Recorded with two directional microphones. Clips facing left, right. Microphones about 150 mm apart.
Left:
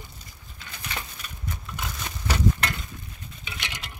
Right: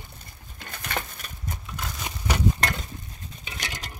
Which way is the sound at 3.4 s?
40° right (ahead or behind).